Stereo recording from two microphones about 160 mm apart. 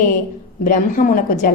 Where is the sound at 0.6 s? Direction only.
55° left (ahead or behind).